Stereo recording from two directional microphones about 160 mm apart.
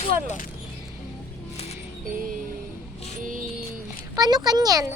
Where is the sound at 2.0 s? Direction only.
60° right (ahead or behind).